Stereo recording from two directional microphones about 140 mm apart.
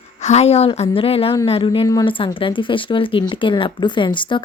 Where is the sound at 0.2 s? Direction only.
55° left (ahead or behind).